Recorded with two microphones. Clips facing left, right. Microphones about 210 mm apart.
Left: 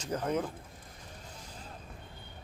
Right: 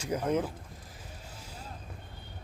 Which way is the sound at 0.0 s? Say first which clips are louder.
Right 3 dB; 10° right (ahead or behind).